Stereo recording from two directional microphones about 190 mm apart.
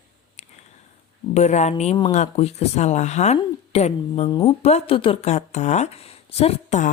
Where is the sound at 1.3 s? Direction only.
35° left (ahead or behind).